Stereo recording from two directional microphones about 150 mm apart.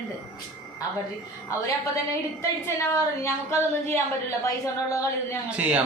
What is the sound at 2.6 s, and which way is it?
A woman's voice, 20° left (ahead or behind).